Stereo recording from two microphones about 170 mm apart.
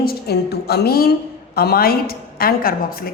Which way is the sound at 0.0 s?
65° left (ahead or behind).